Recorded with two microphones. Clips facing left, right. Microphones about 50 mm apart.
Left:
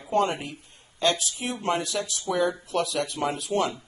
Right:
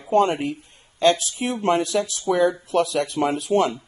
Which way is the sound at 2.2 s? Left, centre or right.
Right.